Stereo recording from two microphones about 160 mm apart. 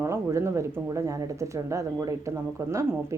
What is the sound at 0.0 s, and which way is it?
Speech, 15° right (ahead or behind).